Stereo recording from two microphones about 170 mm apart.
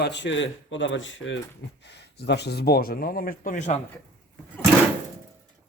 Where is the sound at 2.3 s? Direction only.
75° left (ahead or behind); by 3.7 s 50° left (ahead or behind).